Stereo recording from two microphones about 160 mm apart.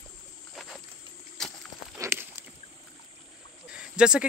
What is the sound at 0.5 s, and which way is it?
Snake, centre (ahead or behind).